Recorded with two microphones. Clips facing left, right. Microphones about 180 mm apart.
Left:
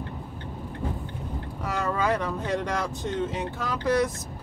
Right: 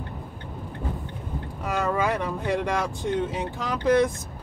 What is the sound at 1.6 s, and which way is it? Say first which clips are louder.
Speech: right 2 dB; 15° right (ahead or behind).